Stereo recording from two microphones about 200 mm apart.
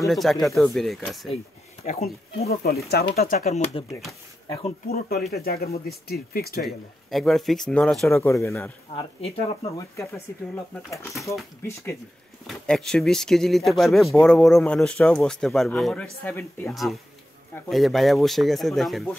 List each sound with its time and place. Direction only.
0.1 s speech: centre (ahead or behind)
2.4 s speech: 50° left (ahead or behind)
3.3 s speech: 35° left (ahead or behind)
4.8 s speech: 50° left (ahead or behind)
6.6 s speech: centre (ahead or behind)
8.3 s speech: 15° left (ahead or behind)
8.9 s speech: 30° left (ahead or behind)
9.8 s speech: 15° left (ahead or behind)
12.4 s speech: centre (ahead or behind)